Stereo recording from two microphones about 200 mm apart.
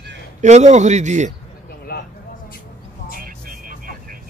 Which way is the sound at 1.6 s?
50° left (ahead or behind).